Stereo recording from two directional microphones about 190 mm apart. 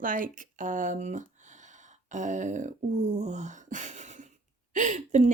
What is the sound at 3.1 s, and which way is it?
Speech, 35° right (ahead or behind).